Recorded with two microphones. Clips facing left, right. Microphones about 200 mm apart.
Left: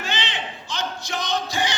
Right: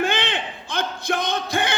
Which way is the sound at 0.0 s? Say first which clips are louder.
Right 6 dB; 55° right (ahead or behind).